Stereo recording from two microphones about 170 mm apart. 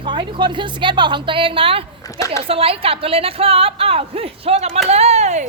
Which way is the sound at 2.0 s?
20° left (ahead or behind).